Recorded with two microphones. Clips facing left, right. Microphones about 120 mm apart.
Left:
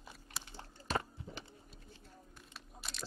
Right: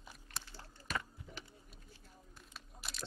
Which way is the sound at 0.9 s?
30° left (ahead or behind).